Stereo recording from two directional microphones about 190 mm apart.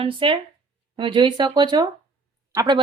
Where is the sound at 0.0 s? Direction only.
25° right (ahead or behind).